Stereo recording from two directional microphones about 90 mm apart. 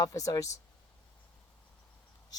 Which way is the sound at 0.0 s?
40° left (ahead or behind).